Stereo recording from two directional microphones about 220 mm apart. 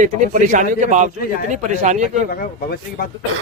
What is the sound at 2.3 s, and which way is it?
Speech, 40° left (ahead or behind).